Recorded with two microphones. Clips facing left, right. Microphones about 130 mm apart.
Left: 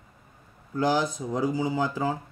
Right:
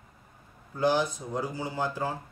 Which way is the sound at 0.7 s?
90° left.